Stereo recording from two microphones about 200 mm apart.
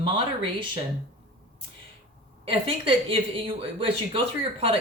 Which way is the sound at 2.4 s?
25° right (ahead or behind).